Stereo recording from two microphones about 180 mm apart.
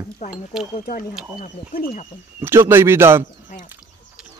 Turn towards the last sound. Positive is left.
turn(degrees=-15)  # may be behind; listen again after turning